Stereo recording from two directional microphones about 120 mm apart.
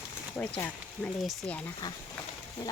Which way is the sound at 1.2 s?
Centre (ahead or behind).